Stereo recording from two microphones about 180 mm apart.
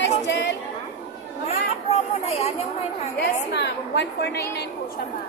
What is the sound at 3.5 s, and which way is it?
A woman's voice, 70° left (ahead or behind).